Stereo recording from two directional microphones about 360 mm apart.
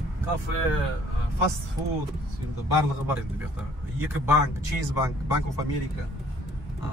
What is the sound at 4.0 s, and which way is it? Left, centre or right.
Speech, centre.